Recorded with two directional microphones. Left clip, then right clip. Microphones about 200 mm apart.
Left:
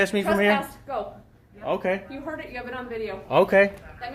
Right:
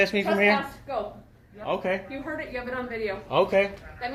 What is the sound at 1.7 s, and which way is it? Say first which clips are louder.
Speech: left 2 dB; 30° left (ahead or behind).